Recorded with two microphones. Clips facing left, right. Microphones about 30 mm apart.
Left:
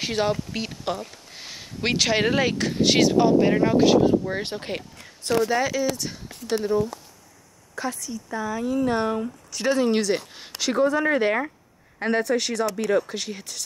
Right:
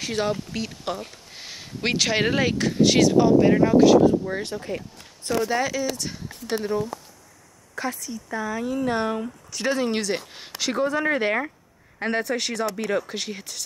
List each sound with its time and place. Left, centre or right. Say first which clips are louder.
0.1 s speech: even; centre
4.6 s speech: even; left
5.4 s speech: left 1 dB; centre